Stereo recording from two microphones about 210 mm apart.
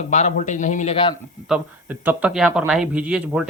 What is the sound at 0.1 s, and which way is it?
A man's voice, 35° left (ahead or behind).